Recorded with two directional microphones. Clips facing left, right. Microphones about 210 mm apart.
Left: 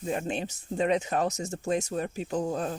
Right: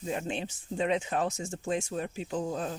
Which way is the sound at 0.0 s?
50° left (ahead or behind).